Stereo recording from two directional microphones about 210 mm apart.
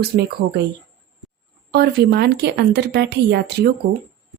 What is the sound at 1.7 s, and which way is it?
Speech, 50° right (ahead or behind).